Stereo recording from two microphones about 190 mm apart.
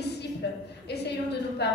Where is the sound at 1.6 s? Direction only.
60° left (ahead or behind).